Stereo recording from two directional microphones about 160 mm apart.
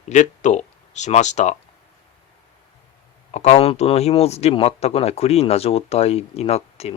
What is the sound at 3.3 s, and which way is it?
Speech, 45° left (ahead or behind).